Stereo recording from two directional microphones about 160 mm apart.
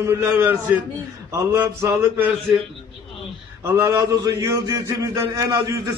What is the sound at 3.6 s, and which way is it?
A man's voice, 15° right (ahead or behind).